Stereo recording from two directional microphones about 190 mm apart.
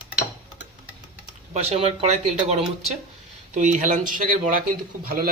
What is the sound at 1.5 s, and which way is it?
Speech, 35° right (ahead or behind).